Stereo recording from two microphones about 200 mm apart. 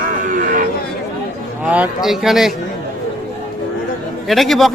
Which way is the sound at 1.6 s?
5° right (ahead or behind).